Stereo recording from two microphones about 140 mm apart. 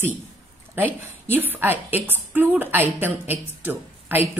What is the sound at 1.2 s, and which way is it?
A woman's voice, 15° right (ahead or behind).